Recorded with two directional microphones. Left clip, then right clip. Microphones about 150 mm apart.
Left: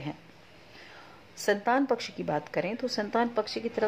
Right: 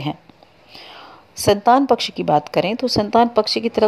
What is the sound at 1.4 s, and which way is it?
Speech, 40° right (ahead or behind).